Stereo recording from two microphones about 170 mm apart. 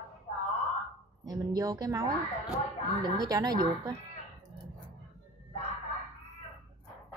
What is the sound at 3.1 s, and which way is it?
Speech, 20° right (ahead or behind).